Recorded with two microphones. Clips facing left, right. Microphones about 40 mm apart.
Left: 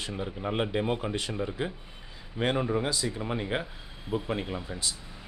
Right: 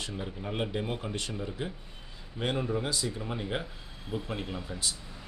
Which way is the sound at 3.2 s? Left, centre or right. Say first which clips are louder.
Left 3 dB; left.